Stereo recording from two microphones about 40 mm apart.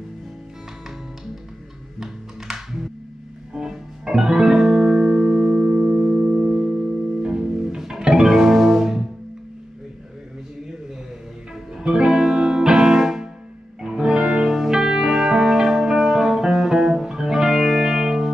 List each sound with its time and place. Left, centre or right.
2.0 s music: centre
11.7 s music: centre